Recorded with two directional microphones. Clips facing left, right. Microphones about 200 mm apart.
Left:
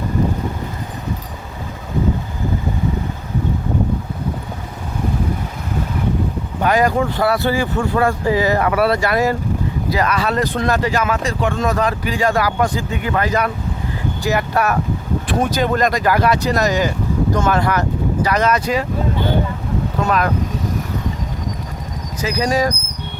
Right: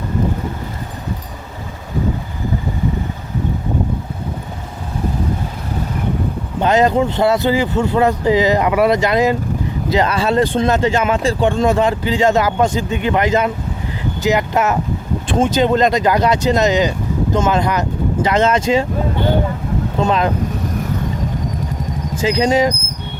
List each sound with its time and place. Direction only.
6.6 s speech: 25° right (ahead or behind)
20.0 s speech: 25° right (ahead or behind)
22.2 s speech: 25° right (ahead or behind)